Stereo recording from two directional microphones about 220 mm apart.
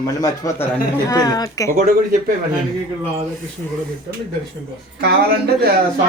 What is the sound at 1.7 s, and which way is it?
Speech, 40° right (ahead or behind).